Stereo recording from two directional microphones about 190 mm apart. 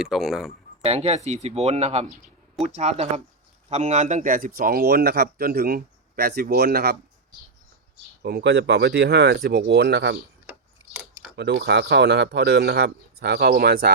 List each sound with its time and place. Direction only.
0.0 s speech: centre (ahead or behind)
0.8 s speech: 35° right (ahead or behind); by 6.9 s 55° right (ahead or behind)
8.2 s speech: 55° right (ahead or behind)
11.3 s speech: 65° right (ahead or behind)